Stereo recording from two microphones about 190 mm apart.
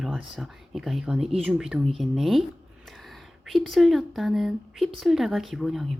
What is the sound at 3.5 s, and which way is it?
Speech, centre (ahead or behind).